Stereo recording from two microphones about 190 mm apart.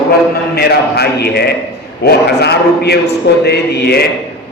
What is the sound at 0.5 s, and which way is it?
Speech, 55° left (ahead or behind).